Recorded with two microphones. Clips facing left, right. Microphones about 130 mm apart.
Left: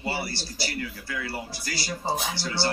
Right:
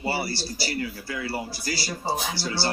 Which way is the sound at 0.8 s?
30° right (ahead or behind).